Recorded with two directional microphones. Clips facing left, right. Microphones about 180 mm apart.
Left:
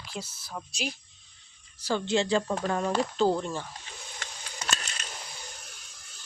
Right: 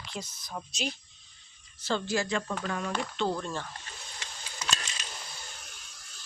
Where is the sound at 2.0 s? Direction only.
25° left (ahead or behind).